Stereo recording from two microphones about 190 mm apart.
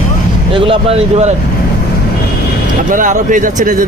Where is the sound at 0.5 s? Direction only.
30° right (ahead or behind).